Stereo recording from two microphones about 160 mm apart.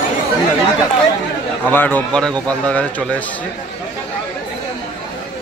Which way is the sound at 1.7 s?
10° left (ahead or behind).